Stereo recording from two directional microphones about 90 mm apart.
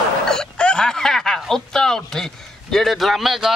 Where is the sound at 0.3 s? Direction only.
10° left (ahead or behind).